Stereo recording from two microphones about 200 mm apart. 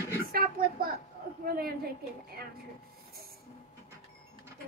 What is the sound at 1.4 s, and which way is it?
Speech, 50° right (ahead or behind).